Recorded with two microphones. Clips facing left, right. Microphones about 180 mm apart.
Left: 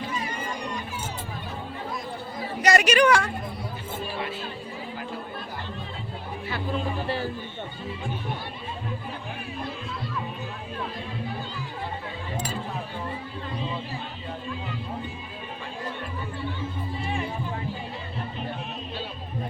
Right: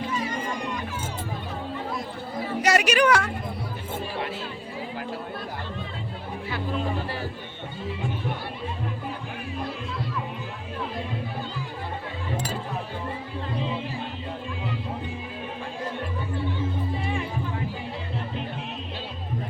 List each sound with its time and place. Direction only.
2.6 s a woman's voice: 10° right (ahead or behind)